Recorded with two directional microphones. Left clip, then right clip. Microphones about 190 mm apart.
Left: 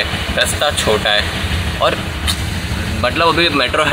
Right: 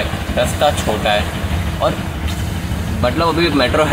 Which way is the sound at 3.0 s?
Centre (ahead or behind).